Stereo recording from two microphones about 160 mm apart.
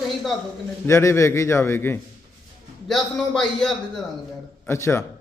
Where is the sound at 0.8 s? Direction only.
20° left (ahead or behind).